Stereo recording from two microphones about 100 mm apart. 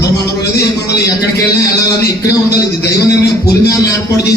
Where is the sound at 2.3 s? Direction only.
35° left (ahead or behind).